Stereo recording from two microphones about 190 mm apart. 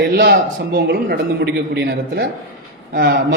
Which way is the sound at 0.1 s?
55° right (ahead or behind).